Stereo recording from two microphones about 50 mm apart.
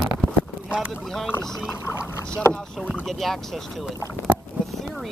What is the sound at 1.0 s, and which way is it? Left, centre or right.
Speech, centre.